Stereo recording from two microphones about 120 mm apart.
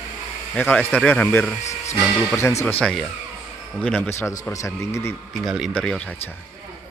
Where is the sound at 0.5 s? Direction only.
15° left (ahead or behind).